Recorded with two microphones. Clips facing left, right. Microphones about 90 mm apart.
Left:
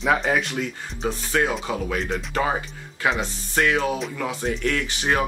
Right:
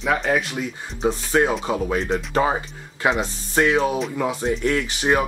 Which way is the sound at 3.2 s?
25° right (ahead or behind).